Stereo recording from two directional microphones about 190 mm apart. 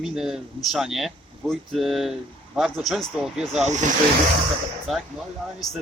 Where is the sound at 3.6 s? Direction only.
40° right (ahead or behind).